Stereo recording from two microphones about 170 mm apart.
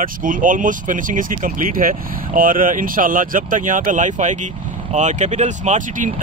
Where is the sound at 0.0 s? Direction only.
50° right (ahead or behind).